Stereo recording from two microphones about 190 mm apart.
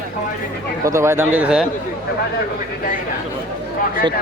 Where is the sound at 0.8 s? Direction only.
15° right (ahead or behind).